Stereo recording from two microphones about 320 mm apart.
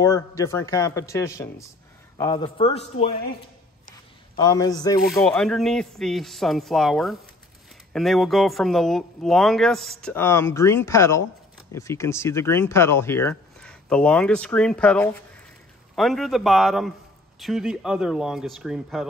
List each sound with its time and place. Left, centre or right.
0.0 s a man's voice: centre
4.4 s a man's voice: centre
5.0 s speech: centre